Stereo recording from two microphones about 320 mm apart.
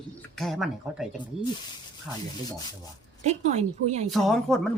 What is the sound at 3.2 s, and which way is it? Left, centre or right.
Speech, right.